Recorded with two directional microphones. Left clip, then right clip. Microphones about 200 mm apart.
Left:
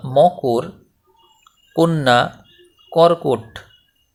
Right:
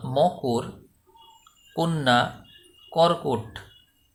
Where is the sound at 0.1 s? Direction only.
25° left (ahead or behind).